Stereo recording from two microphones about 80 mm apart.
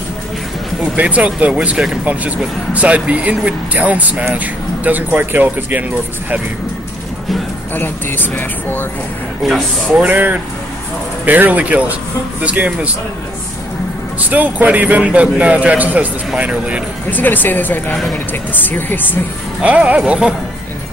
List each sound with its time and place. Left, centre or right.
0.9 s speech: centre
7.7 s speech: left
9.4 s speech: centre
9.8 s speech: centre
14.3 s speech: right
17.1 s speech: left
19.6 s speech: centre